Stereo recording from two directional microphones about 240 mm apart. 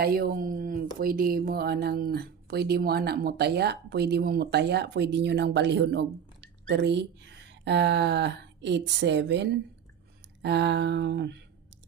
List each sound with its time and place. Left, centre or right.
0.0 s speech: right